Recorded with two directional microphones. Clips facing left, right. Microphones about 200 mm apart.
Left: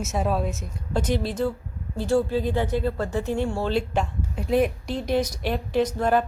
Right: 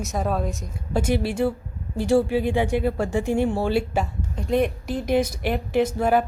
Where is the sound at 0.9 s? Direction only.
10° right (ahead or behind).